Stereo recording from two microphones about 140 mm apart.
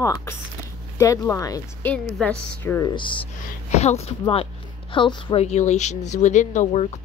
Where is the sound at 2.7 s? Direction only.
30° left (ahead or behind).